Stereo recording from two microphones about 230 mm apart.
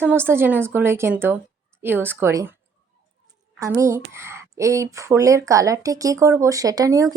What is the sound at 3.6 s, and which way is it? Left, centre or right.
A woman's voice, centre.